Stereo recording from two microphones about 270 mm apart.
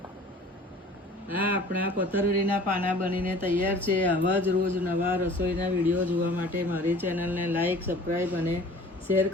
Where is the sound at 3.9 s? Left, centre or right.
Centre.